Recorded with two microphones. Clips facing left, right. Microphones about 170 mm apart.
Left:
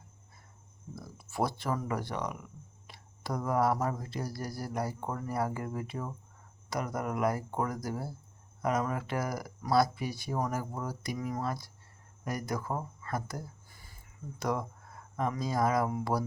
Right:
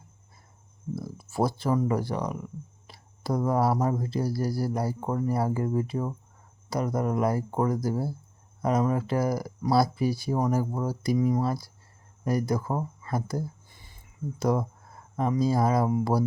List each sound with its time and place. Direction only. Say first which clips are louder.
0.9 s speech: right 5 dB; 30° right (ahead or behind)
13.1 s a sound: right 7 dB; 30° right (ahead or behind)
14.3 s speech: right 7 dB; 30° right (ahead or behind)